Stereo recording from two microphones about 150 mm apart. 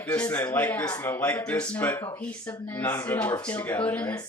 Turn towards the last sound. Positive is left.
turn(degrees=10)  # may be behind; listen again after turning